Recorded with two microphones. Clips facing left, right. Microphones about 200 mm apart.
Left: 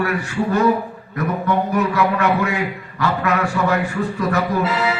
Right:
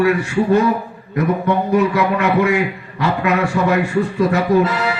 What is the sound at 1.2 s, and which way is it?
A man's voice, 20° right (ahead or behind).